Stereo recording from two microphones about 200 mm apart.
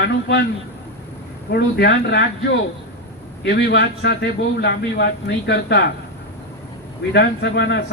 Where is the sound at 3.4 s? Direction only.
60° left (ahead or behind).